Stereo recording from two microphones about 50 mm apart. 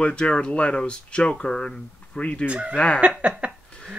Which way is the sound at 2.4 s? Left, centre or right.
Right.